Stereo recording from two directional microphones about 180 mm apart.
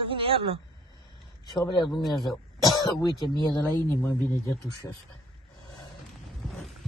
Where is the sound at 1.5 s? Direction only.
25° left (ahead or behind).